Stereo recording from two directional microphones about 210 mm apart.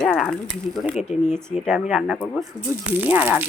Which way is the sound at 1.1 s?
35° left (ahead or behind).